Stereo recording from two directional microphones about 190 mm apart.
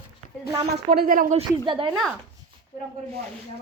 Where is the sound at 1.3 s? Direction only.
25° right (ahead or behind).